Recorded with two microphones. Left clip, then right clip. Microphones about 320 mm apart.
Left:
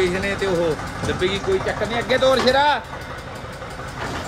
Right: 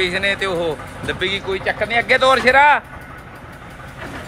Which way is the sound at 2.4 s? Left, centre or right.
Right.